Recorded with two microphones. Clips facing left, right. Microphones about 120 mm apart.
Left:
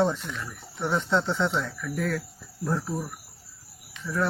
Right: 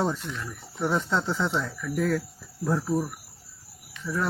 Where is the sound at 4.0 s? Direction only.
20° left (ahead or behind).